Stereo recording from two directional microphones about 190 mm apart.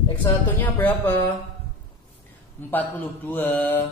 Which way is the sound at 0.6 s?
10° left (ahead or behind).